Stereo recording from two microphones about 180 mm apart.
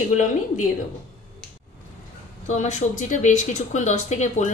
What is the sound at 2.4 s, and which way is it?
A woman's voice, 40° left (ahead or behind).